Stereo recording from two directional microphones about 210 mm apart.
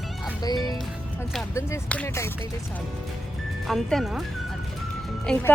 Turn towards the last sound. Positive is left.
turn(degrees=5)  # may be behind; listen again after turning